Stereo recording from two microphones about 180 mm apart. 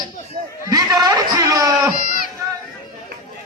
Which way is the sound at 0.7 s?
20° right (ahead or behind).